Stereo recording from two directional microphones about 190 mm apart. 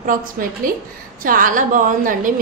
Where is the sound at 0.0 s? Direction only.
45° right (ahead or behind).